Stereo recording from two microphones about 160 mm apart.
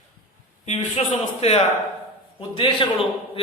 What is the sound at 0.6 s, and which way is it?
A man's voice, 45° left (ahead or behind).